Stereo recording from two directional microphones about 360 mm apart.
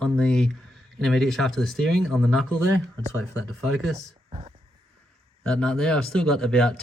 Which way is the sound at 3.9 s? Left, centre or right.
Centre.